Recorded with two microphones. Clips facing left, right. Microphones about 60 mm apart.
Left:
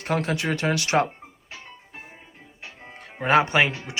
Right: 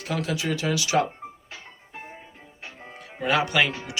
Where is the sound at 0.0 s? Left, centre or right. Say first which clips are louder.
Left 3 dB; left.